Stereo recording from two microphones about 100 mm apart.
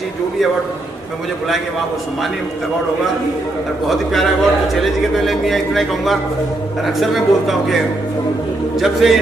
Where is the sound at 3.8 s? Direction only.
Centre (ahead or behind).